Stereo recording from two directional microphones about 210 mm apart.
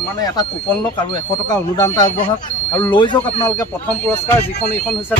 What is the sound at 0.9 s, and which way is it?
Speech, 20° left (ahead or behind).